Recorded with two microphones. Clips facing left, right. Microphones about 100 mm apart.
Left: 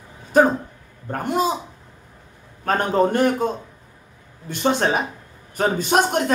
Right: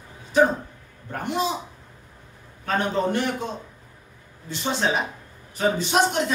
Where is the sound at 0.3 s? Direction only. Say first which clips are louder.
Left 3 dB; 50° left (ahead or behind).